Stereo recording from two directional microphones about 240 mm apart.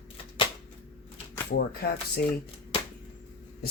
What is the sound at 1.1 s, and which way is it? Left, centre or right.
Speech, left.